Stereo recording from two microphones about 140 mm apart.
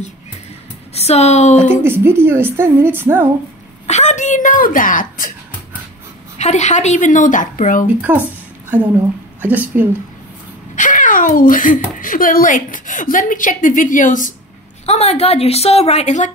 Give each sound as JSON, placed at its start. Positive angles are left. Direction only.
{"t": 0.9, "sound": "a woman's voice", "side_deg": 50}
{"t": 1.7, "sound": "speech", "side_deg": -15}
{"t": 3.8, "sound": "speech", "side_deg": 55}
{"t": 6.3, "sound": "speech", "side_deg": 55}
{"t": 8.1, "sound": "speech", "side_deg": -10}
{"t": 9.4, "sound": "speech", "side_deg": -10}
{"t": 10.8, "sound": "a child's voice", "side_deg": 70}
{"t": 14.9, "sound": "a woman's voice", "side_deg": 50}